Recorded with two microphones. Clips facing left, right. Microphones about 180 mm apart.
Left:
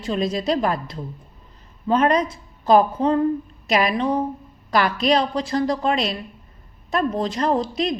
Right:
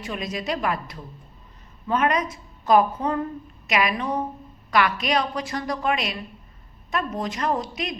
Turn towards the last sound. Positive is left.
turn(degrees=30)  # may be behind; listen again after turning